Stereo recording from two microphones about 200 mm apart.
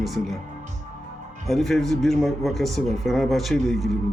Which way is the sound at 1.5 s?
Centre (ahead or behind).